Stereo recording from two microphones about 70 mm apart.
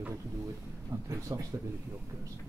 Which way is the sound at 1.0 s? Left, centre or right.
Right.